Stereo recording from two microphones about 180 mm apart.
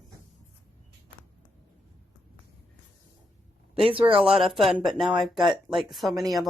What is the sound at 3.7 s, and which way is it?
Speech, 30° right (ahead or behind).